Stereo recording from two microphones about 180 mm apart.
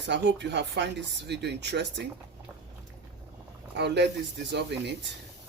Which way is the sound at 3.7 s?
70° right (ahead or behind).